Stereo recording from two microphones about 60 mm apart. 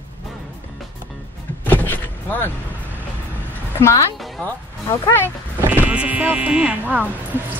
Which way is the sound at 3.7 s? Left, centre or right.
Left.